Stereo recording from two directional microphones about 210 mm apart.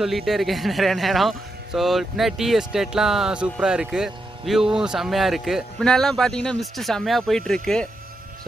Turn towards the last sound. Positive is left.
turn(degrees=5)  # may be behind; listen again after turning